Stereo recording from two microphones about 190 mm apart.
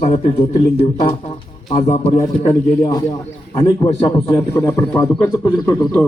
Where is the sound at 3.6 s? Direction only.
20° left (ahead or behind).